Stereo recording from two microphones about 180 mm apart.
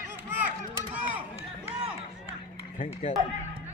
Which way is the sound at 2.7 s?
40° left (ahead or behind).